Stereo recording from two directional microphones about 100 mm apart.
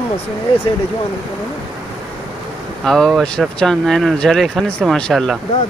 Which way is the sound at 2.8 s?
5° left (ahead or behind).